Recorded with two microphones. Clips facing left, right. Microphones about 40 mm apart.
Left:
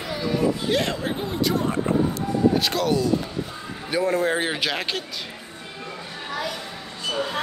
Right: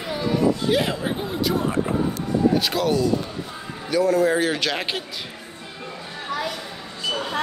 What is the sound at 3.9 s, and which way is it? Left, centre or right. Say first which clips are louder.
Speech: right 3 dB; left.